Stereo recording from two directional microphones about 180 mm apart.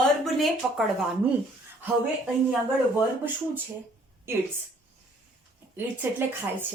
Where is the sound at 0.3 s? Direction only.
Centre (ahead or behind).